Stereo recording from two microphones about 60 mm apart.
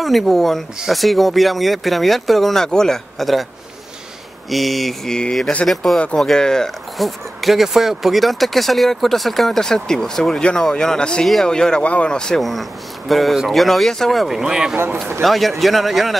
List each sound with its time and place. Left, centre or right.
0.0 s speech: centre
4.5 s speech: centre
5.7 s speech: centre
12.4 s speech: centre
15.2 s speech: centre